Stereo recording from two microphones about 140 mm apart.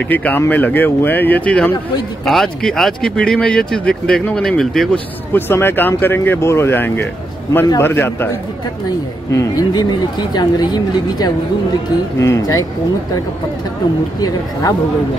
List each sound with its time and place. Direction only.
0.1 s speech: 10° left (ahead or behind)
5.3 s speech: 15° left (ahead or behind)
9.3 s a woman's voice: 25° left (ahead or behind)